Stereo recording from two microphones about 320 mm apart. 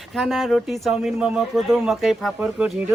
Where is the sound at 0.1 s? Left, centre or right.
Centre.